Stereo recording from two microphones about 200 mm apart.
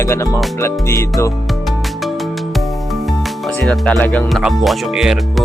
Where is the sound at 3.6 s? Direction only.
Centre (ahead or behind).